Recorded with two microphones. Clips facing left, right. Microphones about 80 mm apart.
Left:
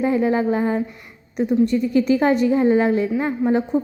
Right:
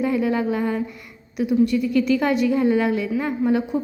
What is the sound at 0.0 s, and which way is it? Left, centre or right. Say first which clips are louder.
Speech: left 3 dB; left.